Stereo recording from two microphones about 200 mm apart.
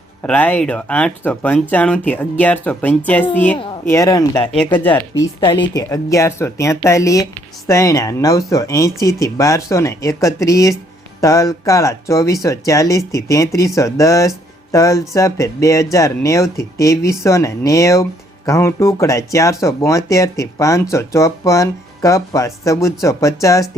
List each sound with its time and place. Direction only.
0.2 s speech: 10° left (ahead or behind)